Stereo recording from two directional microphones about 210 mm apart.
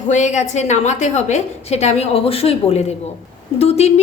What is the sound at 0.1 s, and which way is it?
A woman's voice, 35° left (ahead or behind).